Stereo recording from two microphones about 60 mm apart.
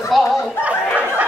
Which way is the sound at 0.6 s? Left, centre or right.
Right.